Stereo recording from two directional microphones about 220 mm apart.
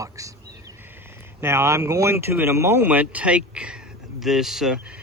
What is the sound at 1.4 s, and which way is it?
Speech, 10° right (ahead or behind).